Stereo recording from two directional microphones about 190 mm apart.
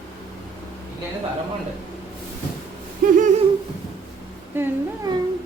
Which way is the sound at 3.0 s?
45° right (ahead or behind).